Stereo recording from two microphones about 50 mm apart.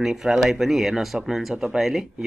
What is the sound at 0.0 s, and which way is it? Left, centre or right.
Speech, centre.